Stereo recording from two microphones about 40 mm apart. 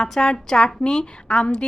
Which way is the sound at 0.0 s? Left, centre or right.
Centre.